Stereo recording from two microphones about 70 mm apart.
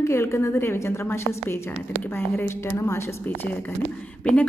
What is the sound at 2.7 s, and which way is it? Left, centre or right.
Speech, left.